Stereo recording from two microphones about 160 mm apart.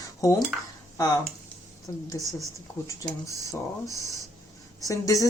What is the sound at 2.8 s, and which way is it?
Speech, 20° left (ahead or behind).